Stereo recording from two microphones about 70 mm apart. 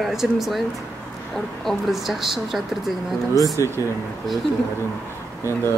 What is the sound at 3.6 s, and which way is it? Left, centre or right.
Speech, left.